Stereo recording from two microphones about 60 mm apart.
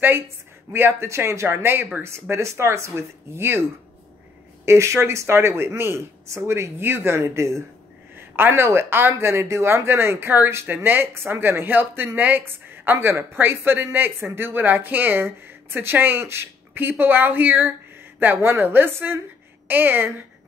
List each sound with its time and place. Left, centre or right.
0.7 s speech: right
1.0 s speech: right
4.6 s speech: right
8.2 s speech: right